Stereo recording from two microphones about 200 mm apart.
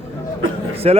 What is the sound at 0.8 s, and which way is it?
Speech, 30° right (ahead or behind).